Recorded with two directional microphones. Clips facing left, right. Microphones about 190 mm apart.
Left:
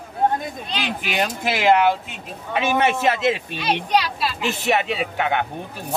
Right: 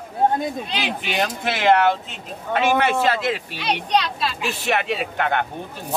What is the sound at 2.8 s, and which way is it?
Speech, 20° left (ahead or behind).